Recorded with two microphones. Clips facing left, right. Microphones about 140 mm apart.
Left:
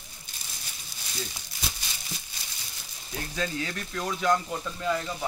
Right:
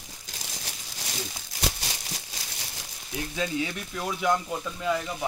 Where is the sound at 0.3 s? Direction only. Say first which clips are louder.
Right 6 dB; 90° right.